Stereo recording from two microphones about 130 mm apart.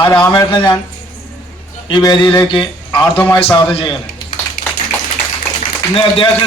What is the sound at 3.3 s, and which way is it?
Speech, 45° left (ahead or behind).